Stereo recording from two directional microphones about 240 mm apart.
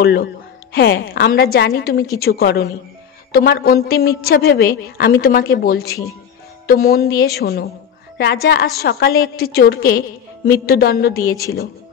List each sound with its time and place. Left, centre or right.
0.0 s a woman's voice: left